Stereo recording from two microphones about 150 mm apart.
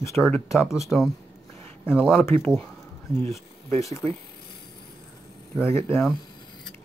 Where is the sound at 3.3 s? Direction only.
20° left (ahead or behind).